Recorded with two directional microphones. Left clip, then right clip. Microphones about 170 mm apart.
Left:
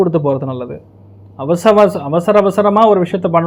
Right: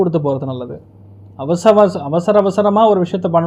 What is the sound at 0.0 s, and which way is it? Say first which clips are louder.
Speech: left 2 dB; 20° left (ahead or behind).